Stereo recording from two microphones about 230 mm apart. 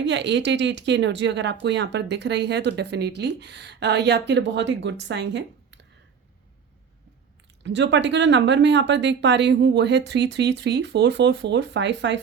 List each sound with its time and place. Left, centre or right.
0.0 s speech: right
7.6 s speech: right